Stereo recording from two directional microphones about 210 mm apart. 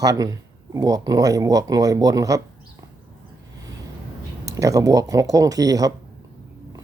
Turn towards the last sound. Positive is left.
turn(degrees=-15)  # may be behind; listen again after turning